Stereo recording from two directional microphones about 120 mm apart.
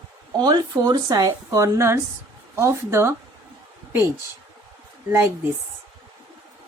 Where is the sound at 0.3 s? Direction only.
35° right (ahead or behind).